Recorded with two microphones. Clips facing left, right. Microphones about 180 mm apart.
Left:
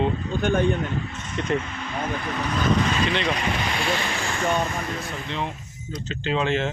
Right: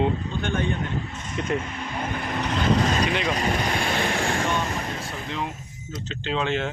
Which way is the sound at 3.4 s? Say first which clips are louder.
Right 2 dB; 40° right (ahead or behind).